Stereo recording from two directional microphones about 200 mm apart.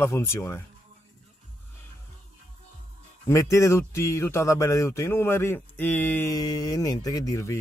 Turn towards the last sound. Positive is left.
turn(degrees=15)  # may be behind; listen again after turning